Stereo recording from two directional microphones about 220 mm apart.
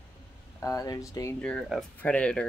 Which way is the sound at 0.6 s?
15° left (ahead or behind).